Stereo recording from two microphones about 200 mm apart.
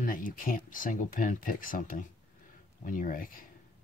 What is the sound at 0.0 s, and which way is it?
Speech, 45° left (ahead or behind).